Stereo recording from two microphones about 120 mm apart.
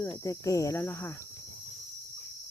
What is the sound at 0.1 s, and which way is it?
Speech, 30° left (ahead or behind).